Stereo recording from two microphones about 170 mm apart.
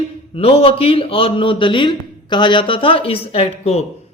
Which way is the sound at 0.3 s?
35° left (ahead or behind).